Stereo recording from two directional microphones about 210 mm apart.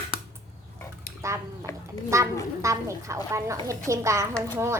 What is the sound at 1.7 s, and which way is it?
Speech, 15° left (ahead or behind).